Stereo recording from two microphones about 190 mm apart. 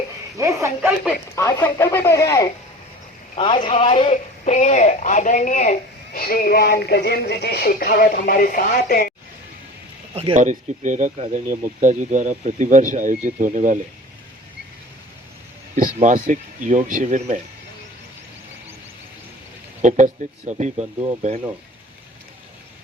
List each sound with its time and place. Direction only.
0.3 s speech: 15° right (ahead or behind)
1.4 s speech: 15° left (ahead or behind)
3.3 s a man's voice: 25° left (ahead or behind)
6.1 s speech: 50° left (ahead or behind)
10.2 s speech: 35° right (ahead or behind)
15.7 s speech: 40° right (ahead or behind)
20.5 s speech: 40° right (ahead or behind)